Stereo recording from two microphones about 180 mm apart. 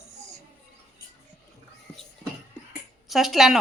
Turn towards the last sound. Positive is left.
turn(degrees=0)  # may be behind; listen again after turning